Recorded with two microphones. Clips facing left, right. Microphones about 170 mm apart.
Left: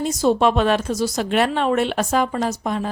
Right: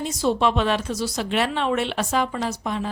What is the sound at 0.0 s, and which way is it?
Speech, 45° left (ahead or behind).